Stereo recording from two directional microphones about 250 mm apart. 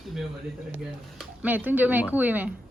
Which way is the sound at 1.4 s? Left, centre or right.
Centre.